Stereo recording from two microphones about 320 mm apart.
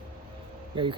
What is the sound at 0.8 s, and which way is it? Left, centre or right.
Speech, centre.